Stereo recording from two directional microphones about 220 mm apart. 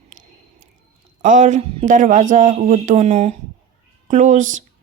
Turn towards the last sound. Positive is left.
turn(degrees=-35)  # may be behind; listen again after turning